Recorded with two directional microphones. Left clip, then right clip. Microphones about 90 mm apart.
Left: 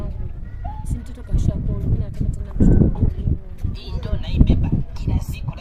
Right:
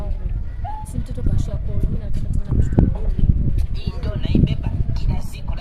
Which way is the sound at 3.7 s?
15° left (ahead or behind).